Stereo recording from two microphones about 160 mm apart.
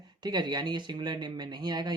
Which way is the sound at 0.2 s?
25° right (ahead or behind).